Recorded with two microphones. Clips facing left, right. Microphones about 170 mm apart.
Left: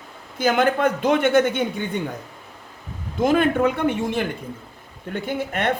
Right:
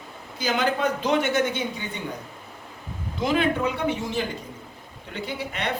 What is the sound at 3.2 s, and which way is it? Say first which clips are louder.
Speech: left 5 dB; 50° left (ahead or behind).